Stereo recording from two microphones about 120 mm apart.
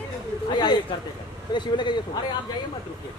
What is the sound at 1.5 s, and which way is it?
Speech, 40° left (ahead or behind).